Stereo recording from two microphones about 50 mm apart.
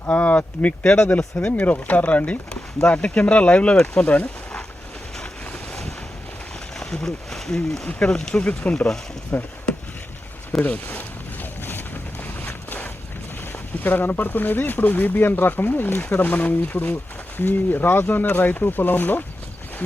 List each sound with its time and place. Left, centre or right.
0.1 s speech: left
0.9 s speech: centre
1.5 s speech: left
6.7 s speech: centre
7.9 s speech: left
9.3 s speech: left
10.6 s speech: left
11.6 s boat: left
12.4 s a sound: left
13.8 s speech: left